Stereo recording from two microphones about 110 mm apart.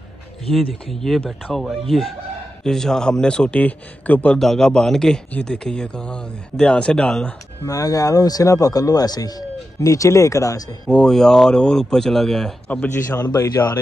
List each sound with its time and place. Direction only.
0.5 s speech: centre (ahead or behind)
7.6 s speech: 30° left (ahead or behind)
10.9 s speech: 5° left (ahead or behind)
12.6 s speech: 15° left (ahead or behind)
13.2 s speech: 30° left (ahead or behind)